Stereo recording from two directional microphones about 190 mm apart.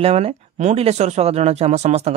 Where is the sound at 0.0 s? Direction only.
30° right (ahead or behind).